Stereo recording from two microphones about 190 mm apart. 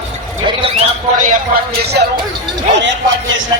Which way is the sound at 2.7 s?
70° right (ahead or behind).